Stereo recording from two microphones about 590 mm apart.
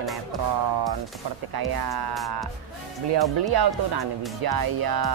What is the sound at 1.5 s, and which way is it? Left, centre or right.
Speech, right.